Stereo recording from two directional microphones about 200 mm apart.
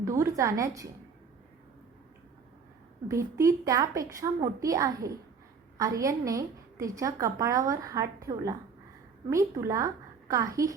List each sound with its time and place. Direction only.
0.0 s a woman's voice: 15° right (ahead or behind)
3.1 s a woman's voice: 15° right (ahead or behind)